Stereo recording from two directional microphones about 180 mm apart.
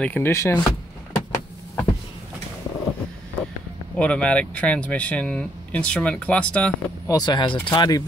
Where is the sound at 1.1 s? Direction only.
15° left (ahead or behind).